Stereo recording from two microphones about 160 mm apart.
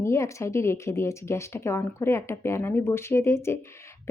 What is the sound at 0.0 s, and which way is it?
Speech, 15° left (ahead or behind).